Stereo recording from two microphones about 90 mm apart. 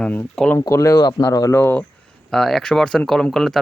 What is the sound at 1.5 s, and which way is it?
Speech, 25° left (ahead or behind).